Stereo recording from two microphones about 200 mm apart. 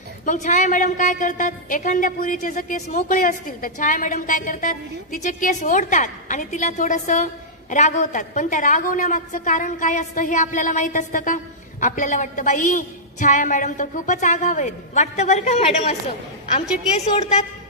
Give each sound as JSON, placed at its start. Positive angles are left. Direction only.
{"t": 0.2, "sound": "a woman's voice", "side_deg": 40}
{"t": 17.0, "sound": "a woman's voice", "side_deg": 35}